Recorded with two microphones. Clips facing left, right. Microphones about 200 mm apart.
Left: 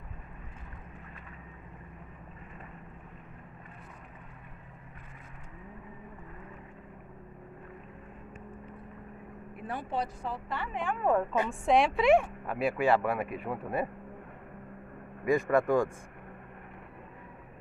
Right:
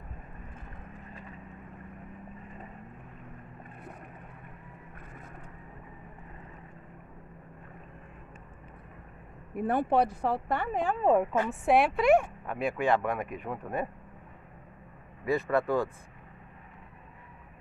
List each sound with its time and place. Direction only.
9.6 s speech: 55° right (ahead or behind); by 11.0 s 40° right (ahead or behind)
11.0 s speech: 20° right (ahead or behind)
11.4 s speech: 5° right (ahead or behind)
15.2 s speech: 15° left (ahead or behind)